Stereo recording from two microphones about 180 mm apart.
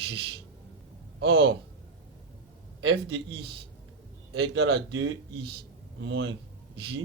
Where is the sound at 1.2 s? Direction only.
90° right.